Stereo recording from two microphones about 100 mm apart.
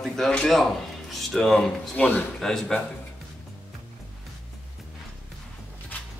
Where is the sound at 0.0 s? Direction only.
5° left (ahead or behind).